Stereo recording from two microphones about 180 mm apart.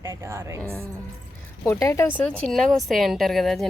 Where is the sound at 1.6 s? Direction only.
15° left (ahead or behind).